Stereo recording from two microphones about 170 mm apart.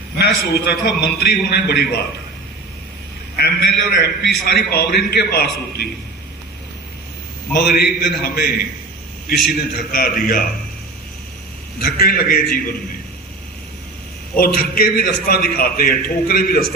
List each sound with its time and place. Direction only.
0.2 s a man's voice: 70° left (ahead or behind)
3.3 s a man's voice: 70° left (ahead or behind)
7.5 s a man's voice: 70° left (ahead or behind)
11.9 s a man's voice: 60° left (ahead or behind)
14.3 s a man's voice: 60° left (ahead or behind)